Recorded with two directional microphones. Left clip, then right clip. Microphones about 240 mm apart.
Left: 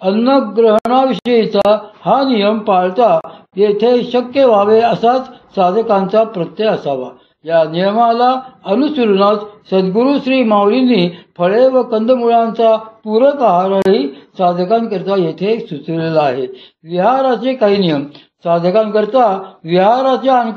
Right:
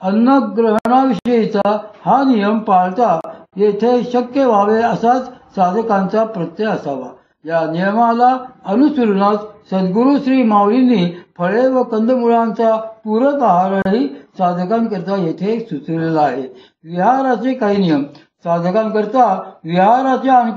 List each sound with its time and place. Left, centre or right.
0.0 s speech: left
0.7 s speech: centre
1.3 s speech: left
15.5 s speech: centre
16.0 s speech: left